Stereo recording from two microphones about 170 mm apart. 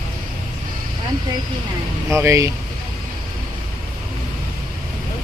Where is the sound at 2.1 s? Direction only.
15° right (ahead or behind).